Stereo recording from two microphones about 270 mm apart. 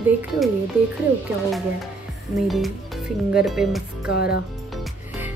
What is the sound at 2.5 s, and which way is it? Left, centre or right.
Speech, centre.